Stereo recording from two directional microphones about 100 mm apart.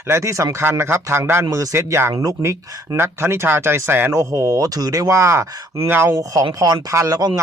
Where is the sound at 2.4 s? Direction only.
25° right (ahead or behind).